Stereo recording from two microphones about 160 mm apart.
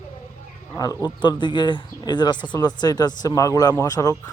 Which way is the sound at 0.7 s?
20° left (ahead or behind).